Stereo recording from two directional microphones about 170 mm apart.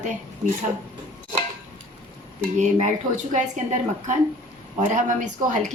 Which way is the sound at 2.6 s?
45° right (ahead or behind).